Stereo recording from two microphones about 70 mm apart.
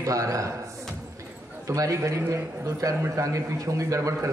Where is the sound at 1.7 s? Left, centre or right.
Right.